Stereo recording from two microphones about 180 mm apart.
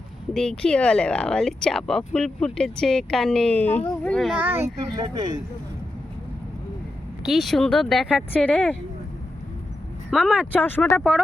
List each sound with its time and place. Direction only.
0.3 s speech: 5° left (ahead or behind); by 4.7 s 10° right (ahead or behind)
4.9 s speech: 25° right (ahead or behind)
7.2 s speech: centre (ahead or behind)
10.1 s speech: 5° right (ahead or behind)
10.5 s speech: 10° left (ahead or behind)